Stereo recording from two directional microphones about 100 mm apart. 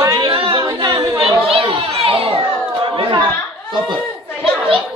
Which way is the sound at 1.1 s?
65° right (ahead or behind).